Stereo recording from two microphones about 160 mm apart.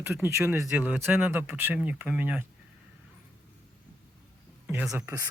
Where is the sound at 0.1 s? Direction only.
15° right (ahead or behind).